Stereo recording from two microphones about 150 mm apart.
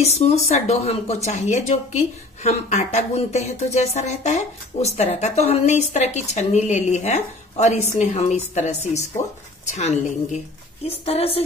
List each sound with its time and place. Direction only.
0.0 s a woman's voice: 45° left (ahead or behind)